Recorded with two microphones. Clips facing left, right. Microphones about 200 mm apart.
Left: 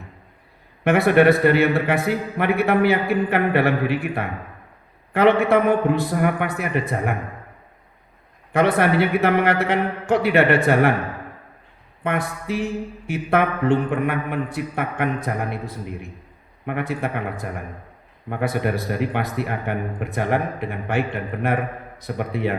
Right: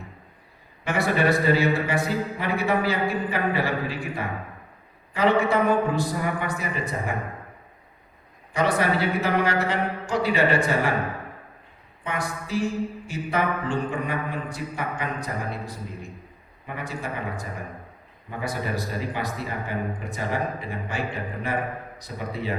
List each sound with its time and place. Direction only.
0.9 s speech: 60° left (ahead or behind)
8.5 s speech: 60° left (ahead or behind)
12.0 s speech: 60° left (ahead or behind)